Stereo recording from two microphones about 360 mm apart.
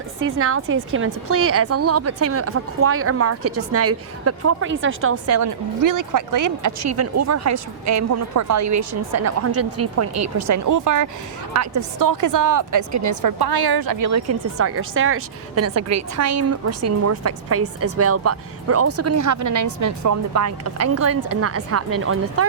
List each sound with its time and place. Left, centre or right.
0.2 s a woman's voice: right
13.4 s a woman's voice: right